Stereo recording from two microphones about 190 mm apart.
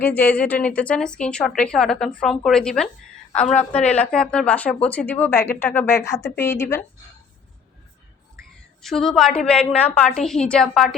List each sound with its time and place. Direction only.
0.2 s a woman's voice: 10° left (ahead or behind)
8.8 s a woman's voice: centre (ahead or behind)